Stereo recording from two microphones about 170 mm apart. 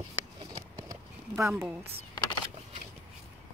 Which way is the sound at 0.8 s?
15° right (ahead or behind).